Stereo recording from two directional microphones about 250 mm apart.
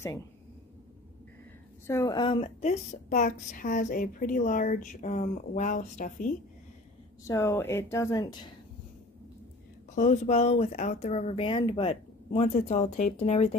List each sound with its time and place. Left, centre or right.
1.9 s a woman's voice: centre; by 6.3 s left
7.2 s speech: centre
9.9 s a woman's voice: left